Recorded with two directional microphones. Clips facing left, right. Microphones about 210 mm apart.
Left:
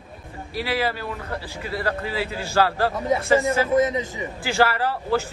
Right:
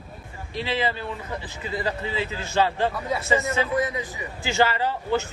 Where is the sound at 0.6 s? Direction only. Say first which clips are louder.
Left 1 dB; 10° left (ahead or behind).